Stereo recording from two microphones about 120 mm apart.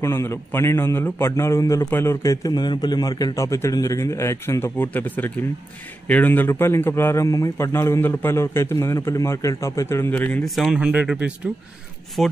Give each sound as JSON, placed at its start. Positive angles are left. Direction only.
{"t": 0.0, "sound": "a man's voice", "side_deg": 20}
{"t": 10.4, "sound": "speech", "side_deg": 0}
{"t": 12.2, "sound": "speech", "side_deg": 0}